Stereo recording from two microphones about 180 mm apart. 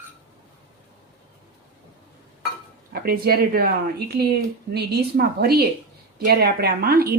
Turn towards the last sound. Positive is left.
turn(degrees=-60)  # may be behind; listen again after turning